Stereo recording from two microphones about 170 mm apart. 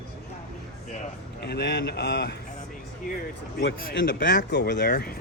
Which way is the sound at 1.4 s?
80° left.